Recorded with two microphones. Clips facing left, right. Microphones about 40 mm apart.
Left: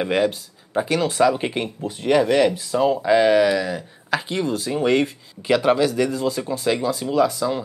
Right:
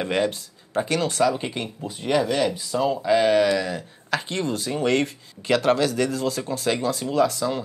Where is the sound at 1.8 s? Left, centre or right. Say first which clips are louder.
Left 4 dB; centre.